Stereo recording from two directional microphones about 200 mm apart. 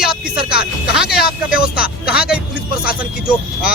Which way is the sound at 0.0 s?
5° right (ahead or behind).